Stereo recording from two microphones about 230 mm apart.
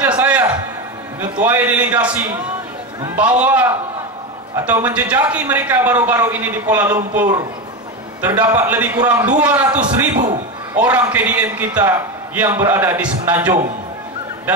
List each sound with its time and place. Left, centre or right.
0.2 s music: centre
1.4 s a man's voice: centre
10.1 s a man's voice: right
10.8 s speech: centre